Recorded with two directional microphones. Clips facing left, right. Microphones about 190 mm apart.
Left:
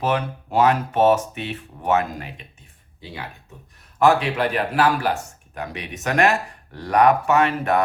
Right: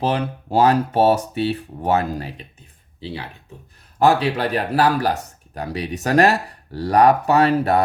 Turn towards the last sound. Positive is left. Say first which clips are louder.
# right 3 dB
turn(degrees=-35)  # may be behind; listen again after turning